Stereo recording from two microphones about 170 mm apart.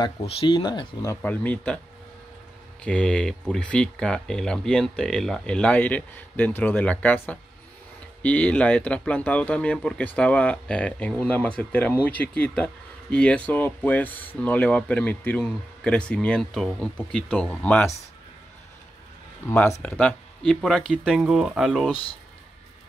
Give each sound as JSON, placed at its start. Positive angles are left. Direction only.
{"t": 0.0, "sound": "speech", "side_deg": 25}
{"t": 1.2, "sound": "speech", "side_deg": 10}
{"t": 2.8, "sound": "speech", "side_deg": 5}
{"t": 19.5, "sound": "speech", "side_deg": 10}